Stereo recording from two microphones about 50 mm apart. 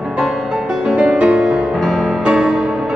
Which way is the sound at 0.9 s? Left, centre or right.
Right.